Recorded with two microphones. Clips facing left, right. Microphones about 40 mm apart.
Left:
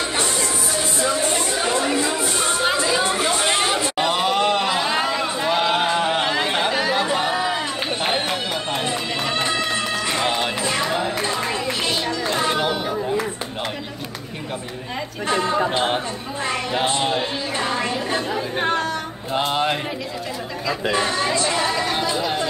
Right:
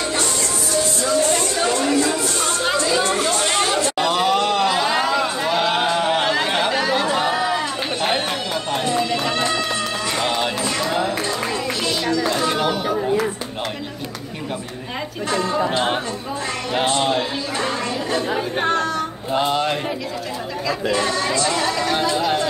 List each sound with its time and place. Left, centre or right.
1.0 s chatter: centre
4.2 s a sound: centre
8.8 s run: centre
10.1 s run: centre
10.9 s a sound: centre
12.1 s music: left
15.2 s chatter: left
16.8 s a sound: centre
17.6 s a sound: left
18.6 s chatter: centre
19.5 s music: centre
20.9 s chatter: left
22.1 s chatter: centre